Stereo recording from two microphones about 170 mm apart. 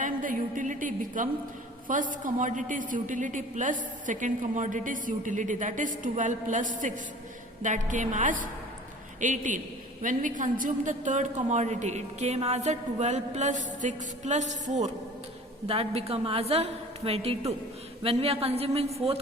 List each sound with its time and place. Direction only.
0.0 s a woman's voice: 50° right (ahead or behind); by 18.9 s 35° right (ahead or behind)